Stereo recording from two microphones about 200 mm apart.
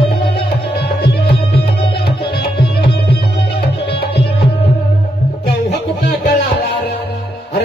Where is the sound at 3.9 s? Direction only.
55° left (ahead or behind).